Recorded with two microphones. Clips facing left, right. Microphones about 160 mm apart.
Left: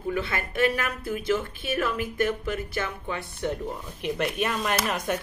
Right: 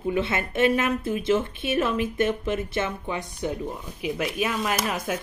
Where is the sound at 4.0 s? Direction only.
5° right (ahead or behind).